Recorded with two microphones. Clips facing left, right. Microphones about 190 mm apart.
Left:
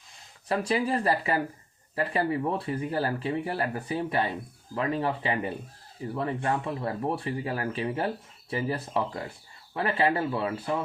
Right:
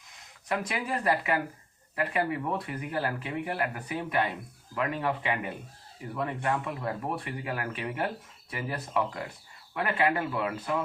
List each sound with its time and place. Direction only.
0.4 s speech: 30° left (ahead or behind)